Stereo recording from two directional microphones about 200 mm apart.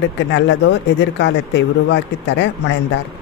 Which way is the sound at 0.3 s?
60° left (ahead or behind).